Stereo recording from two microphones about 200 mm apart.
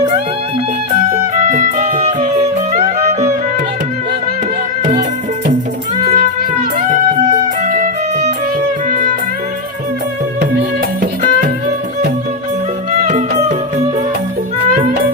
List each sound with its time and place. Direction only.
1.5 s music: 35° right (ahead or behind)
6.0 s music: 35° right (ahead or behind)
13.0 s music: 40° right (ahead or behind)